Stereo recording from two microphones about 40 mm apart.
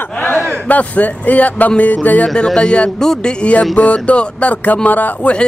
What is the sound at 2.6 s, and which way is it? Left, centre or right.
Speech, left.